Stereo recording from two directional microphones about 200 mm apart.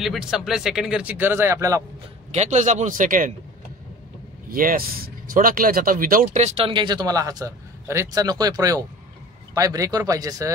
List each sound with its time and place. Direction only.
0.0 s speech: centre (ahead or behind)
2.3 s a man's voice: 35° right (ahead or behind)
4.5 s speech: 45° right (ahead or behind); by 10.5 s 15° right (ahead or behind)